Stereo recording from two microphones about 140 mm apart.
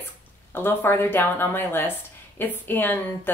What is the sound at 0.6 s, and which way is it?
Speech, 15° left (ahead or behind).